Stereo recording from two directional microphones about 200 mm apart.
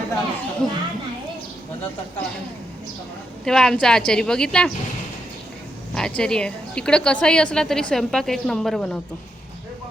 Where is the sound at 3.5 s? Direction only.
5° left (ahead or behind).